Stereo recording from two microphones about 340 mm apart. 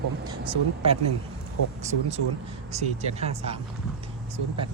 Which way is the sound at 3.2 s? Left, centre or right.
Centre.